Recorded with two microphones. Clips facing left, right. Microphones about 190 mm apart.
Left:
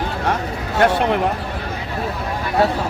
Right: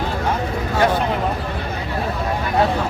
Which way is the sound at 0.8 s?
70° left (ahead or behind).